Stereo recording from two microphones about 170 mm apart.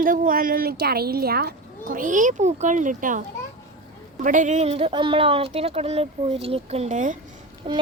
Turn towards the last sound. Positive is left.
turn(degrees=-30)  # may be behind; listen again after turning